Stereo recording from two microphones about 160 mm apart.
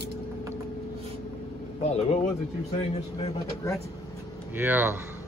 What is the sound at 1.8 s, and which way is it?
Speech, 40° left (ahead or behind).